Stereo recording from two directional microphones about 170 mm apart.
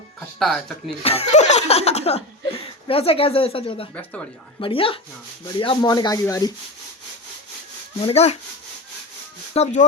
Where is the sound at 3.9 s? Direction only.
5° left (ahead or behind).